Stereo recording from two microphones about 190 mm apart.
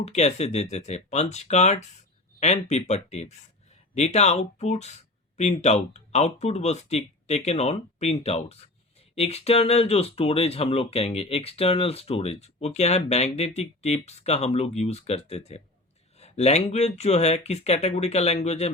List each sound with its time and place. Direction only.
0.0 s speech: 35° left (ahead or behind)
16.1 s a sound: 35° left (ahead or behind)
16.7 s speech: 35° left (ahead or behind)